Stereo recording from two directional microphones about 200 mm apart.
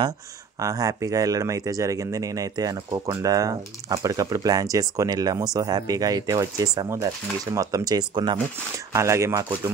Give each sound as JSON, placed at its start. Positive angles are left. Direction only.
{"t": 0.6, "sound": "speech", "side_deg": -15}